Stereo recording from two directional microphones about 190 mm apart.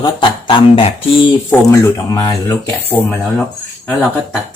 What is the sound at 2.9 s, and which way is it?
Speech, 5° left (ahead or behind).